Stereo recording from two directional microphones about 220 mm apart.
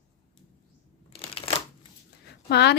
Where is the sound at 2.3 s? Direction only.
50° left (ahead or behind).